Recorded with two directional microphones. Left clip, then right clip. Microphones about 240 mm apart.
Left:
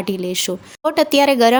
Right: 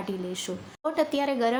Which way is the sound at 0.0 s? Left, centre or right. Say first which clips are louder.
Left 11 dB; left.